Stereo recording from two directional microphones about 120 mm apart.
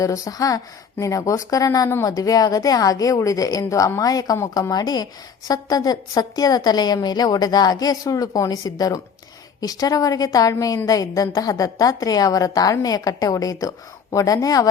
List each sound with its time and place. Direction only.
0.0 s a woman's voice: 30° left (ahead or behind)